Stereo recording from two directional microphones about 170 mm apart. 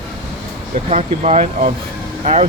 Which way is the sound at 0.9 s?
40° right (ahead or behind).